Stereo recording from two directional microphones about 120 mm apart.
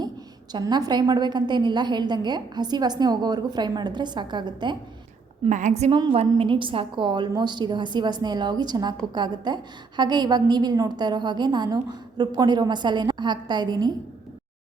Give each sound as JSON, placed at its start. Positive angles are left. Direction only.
{"t": 0.5, "sound": "a woman's voice", "side_deg": -35}
{"t": 5.5, "sound": "a woman's voice", "side_deg": -90}
{"t": 6.2, "sound": "a woman's voice", "side_deg": -45}